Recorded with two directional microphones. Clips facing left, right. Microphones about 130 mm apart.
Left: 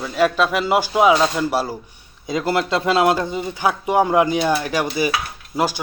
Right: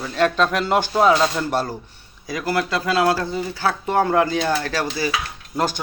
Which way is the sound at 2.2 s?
25° left (ahead or behind).